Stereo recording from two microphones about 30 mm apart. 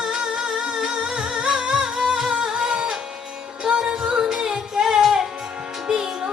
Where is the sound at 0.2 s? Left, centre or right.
Right.